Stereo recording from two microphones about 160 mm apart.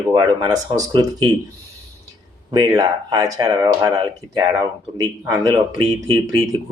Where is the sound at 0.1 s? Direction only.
25° right (ahead or behind).